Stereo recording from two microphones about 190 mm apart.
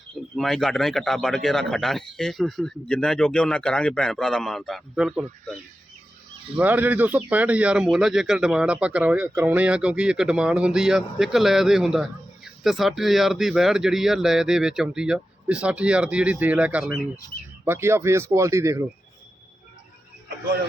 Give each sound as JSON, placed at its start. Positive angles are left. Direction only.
{"t": 0.3, "sound": "speech", "side_deg": 0}
{"t": 6.6, "sound": "speech", "side_deg": -10}